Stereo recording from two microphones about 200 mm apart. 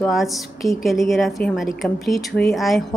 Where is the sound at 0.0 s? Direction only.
Centre (ahead or behind).